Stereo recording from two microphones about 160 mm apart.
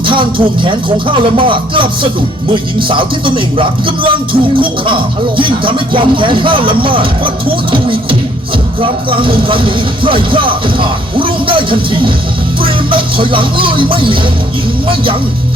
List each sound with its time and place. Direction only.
0.0 s speech: 30° right (ahead or behind)